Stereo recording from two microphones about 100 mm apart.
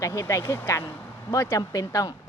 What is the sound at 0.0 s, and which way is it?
Speech, 35° left (ahead or behind).